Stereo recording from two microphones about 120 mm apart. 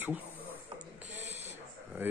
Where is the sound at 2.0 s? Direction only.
15° right (ahead or behind).